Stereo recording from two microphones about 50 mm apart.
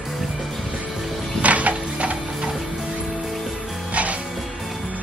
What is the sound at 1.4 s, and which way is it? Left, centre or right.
Music, right.